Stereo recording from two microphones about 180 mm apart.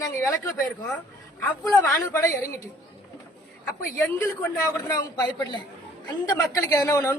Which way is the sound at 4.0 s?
10° left (ahead or behind).